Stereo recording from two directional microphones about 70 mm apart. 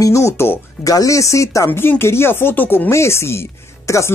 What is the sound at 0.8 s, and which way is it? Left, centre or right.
Speech, left.